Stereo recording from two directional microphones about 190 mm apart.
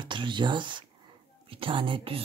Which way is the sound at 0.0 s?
25° right (ahead or behind).